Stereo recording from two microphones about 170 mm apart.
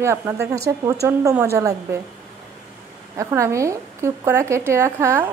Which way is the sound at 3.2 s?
15° right (ahead or behind).